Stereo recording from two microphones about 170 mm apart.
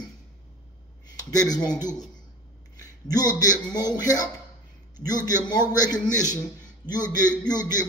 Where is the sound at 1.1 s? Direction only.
20° left (ahead or behind).